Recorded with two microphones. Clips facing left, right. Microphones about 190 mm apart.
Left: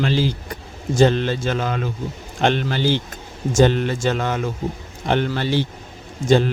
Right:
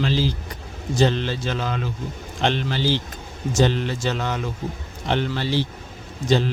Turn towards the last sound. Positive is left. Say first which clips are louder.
# left 4 dB
turn(degrees=50)  # may be behind; listen again after turning